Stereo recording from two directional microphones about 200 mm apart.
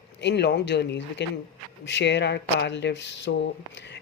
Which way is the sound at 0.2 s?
60° left (ahead or behind).